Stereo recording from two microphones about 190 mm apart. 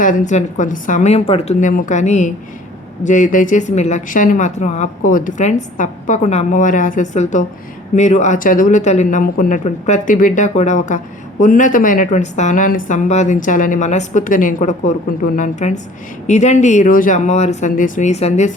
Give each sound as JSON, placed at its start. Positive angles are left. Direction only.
{"t": 0.0, "sound": "speech", "side_deg": 40}